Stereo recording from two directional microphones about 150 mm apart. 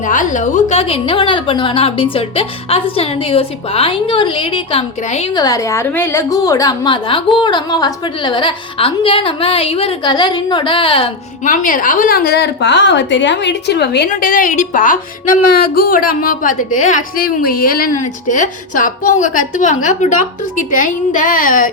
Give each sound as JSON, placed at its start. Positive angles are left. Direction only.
{"t": 0.0, "sound": "a woman's voice", "side_deg": 60}
{"t": 5.3, "sound": "a woman's voice", "side_deg": 25}
{"t": 11.4, "sound": "a woman's voice", "side_deg": 60}
{"t": 13.7, "sound": "a woman's voice", "side_deg": 90}